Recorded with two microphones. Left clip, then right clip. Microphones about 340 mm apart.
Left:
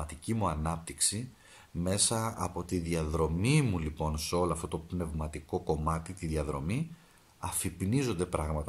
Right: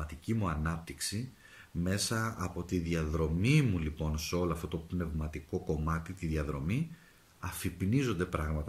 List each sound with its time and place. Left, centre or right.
0.0 s speech: centre